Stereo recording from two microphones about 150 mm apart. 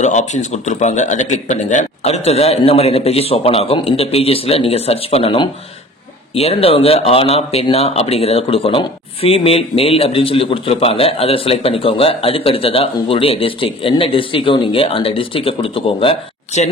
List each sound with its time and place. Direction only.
0.0 s a man's voice: 50° left (ahead or behind)